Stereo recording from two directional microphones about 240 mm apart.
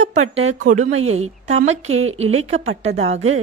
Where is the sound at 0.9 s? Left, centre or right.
Right.